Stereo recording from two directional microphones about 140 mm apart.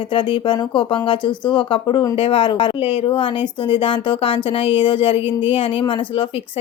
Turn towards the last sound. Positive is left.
turn(degrees=40)  # may be behind; listen again after turning